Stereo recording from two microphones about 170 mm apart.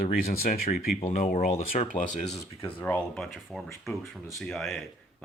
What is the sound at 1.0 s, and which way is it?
Speech, 45° left (ahead or behind).